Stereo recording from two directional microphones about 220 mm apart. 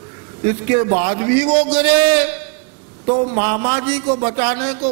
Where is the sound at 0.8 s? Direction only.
20° right (ahead or behind).